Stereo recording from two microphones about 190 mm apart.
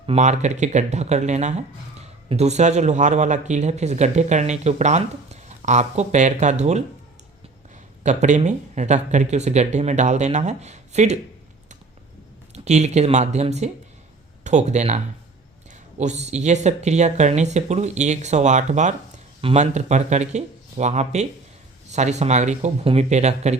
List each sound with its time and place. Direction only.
0.0 s speech: 35° right (ahead or behind)
8.0 s speech: 40° right (ahead or behind)
12.5 s speech: 35° right (ahead or behind)